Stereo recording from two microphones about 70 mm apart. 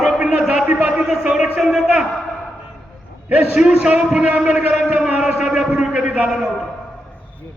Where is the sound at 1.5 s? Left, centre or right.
Centre.